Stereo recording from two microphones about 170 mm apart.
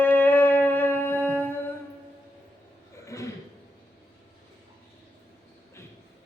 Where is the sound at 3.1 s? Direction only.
20° left (ahead or behind).